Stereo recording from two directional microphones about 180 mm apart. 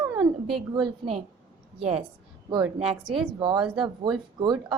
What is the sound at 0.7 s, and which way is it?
Speech, 30° right (ahead or behind).